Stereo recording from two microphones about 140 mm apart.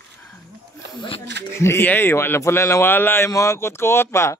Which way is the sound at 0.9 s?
35° left (ahead or behind).